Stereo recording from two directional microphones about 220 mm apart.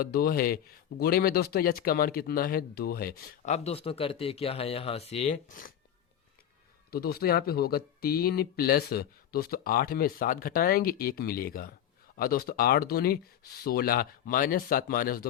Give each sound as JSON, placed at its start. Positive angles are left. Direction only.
{"t": 0.0, "sound": "speech", "side_deg": 45}
{"t": 6.9, "sound": "speech", "side_deg": 45}